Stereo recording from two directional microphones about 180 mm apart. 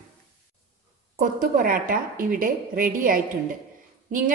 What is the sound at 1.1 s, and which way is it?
A woman's voice, 50° right (ahead or behind).